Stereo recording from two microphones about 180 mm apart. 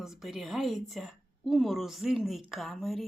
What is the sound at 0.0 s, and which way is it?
A woman's voice, centre (ahead or behind).